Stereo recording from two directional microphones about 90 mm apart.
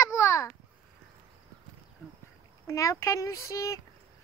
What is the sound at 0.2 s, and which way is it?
Babbling, 30° left (ahead or behind).